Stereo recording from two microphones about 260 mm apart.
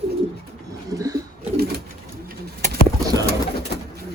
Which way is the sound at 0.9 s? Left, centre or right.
Centre.